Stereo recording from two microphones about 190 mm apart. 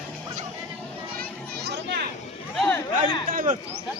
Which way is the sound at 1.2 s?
55° right (ahead or behind).